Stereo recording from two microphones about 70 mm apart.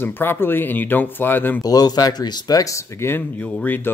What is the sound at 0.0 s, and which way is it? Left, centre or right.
Speech, left.